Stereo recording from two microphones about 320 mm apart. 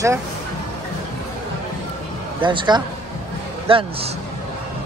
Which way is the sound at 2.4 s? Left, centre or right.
Centre.